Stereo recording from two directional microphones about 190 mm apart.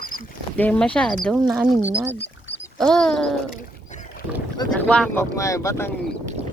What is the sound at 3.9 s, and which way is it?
Rowboat, 40° left (ahead or behind).